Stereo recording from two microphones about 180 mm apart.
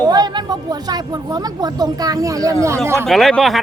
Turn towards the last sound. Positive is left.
turn(degrees=0)  # may be behind; listen again after turning